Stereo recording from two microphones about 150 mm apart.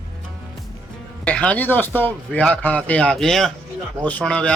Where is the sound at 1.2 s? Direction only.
10° left (ahead or behind).